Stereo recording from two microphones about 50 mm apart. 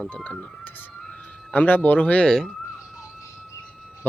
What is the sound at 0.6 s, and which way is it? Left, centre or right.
Speech, left.